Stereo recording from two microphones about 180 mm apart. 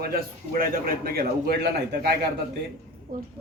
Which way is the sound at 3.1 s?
50° right (ahead or behind).